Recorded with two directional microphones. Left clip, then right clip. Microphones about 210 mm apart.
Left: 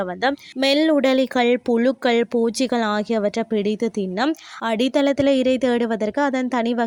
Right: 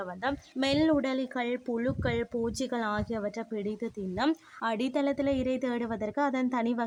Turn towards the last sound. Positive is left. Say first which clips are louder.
# left 8 dB
turn(degrees=30)  # may be behind; listen again after turning